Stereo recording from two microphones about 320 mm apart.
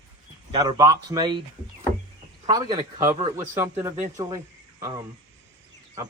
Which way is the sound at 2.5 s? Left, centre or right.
Centre.